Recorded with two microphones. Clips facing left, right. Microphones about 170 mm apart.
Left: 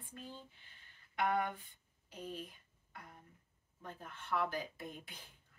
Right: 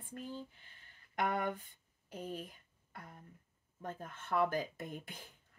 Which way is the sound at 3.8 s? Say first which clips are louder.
Right 3 dB; 45° right (ahead or behind).